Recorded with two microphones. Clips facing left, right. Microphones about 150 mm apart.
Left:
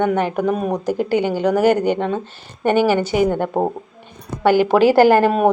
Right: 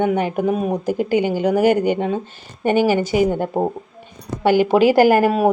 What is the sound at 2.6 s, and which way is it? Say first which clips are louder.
Speech: left 1 dB; 50° left (ahead or behind).